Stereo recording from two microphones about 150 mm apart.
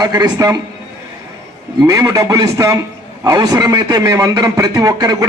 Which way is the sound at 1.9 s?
25° right (ahead or behind).